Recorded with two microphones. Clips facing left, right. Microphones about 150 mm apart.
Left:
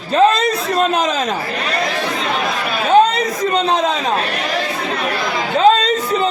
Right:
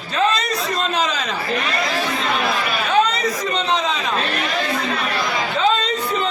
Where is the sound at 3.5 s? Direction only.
45° left (ahead or behind).